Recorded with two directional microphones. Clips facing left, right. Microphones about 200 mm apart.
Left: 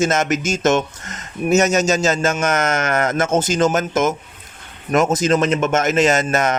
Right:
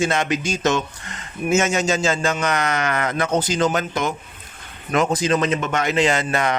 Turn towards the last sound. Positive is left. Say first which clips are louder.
# left 3 dB
turn(degrees=45)  # may be behind; listen again after turning